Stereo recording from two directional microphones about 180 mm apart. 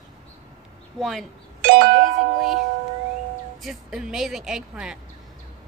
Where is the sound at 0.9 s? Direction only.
Centre (ahead or behind).